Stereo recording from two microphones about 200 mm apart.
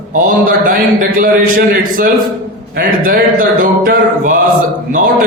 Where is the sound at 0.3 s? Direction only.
45° right (ahead or behind).